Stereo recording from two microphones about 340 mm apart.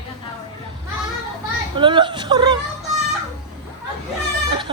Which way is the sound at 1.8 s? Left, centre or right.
Centre.